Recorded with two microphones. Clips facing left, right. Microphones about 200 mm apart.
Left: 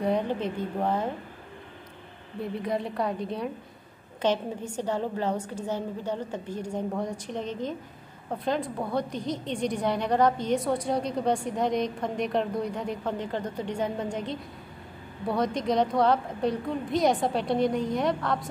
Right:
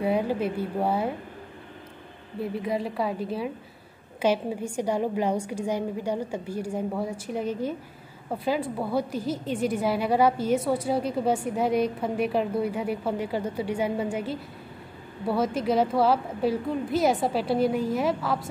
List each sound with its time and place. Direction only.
0.0 s a woman's voice: 5° right (ahead or behind)
2.4 s a woman's voice: centre (ahead or behind)